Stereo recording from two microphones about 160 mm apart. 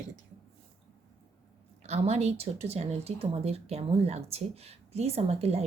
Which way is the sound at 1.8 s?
40° right (ahead or behind).